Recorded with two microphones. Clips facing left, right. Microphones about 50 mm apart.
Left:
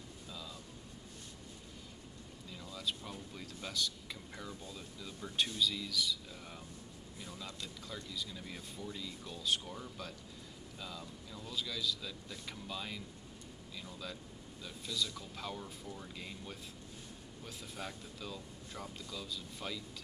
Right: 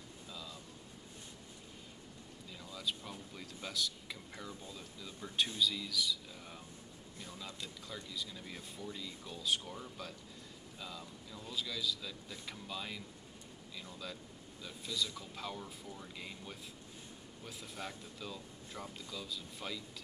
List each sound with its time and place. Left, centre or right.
2.7 s speech: centre
7.2 s speech: centre